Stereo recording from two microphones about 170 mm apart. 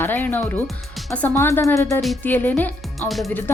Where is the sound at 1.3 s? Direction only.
15° left (ahead or behind).